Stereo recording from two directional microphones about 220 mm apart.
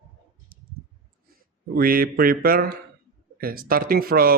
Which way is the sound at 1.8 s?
40° right (ahead or behind).